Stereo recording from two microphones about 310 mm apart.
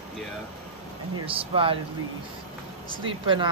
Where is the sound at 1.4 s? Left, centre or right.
Centre.